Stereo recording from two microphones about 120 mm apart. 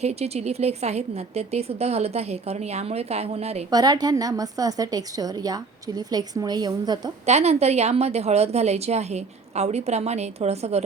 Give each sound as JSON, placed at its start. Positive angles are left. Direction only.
{"t": 0.0, "sound": "a woman's voice", "side_deg": -65}
{"t": 3.7, "sound": "a woman's voice", "side_deg": -35}
{"t": 7.3, "sound": "a woman's voice", "side_deg": -65}